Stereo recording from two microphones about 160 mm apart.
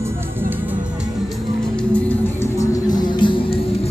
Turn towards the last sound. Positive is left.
turn(degrees=30)  # may be behind; listen again after turning